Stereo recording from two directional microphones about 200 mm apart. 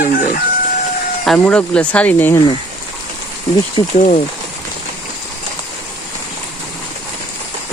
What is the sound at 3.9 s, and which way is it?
Speech, 35° left (ahead or behind).